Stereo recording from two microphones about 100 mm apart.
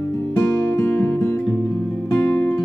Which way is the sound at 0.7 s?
25° left (ahead or behind).